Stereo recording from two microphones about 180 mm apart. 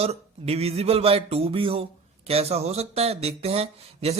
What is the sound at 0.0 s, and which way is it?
Speech, 35° right (ahead or behind).